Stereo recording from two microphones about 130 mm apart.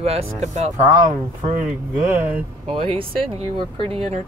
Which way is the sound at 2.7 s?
45° right (ahead or behind).